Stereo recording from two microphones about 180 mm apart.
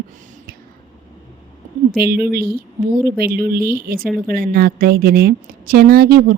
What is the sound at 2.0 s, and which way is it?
A woman's voice, 60° right (ahead or behind).